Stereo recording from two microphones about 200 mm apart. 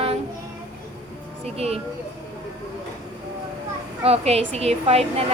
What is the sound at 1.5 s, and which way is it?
Speech, 30° right (ahead or behind).